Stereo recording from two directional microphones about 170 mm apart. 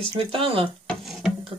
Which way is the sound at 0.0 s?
30° right (ahead or behind).